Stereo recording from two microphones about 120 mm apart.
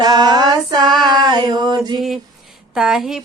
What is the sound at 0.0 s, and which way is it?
Music, 35° right (ahead or behind).